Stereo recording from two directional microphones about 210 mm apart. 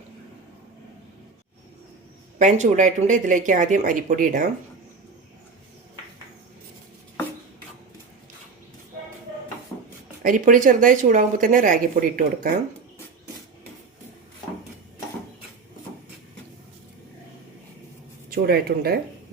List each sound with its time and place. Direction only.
2.4 s speech: 35° right (ahead or behind)
10.2 s speech: 40° right (ahead or behind)
18.3 s speech: 45° right (ahead or behind)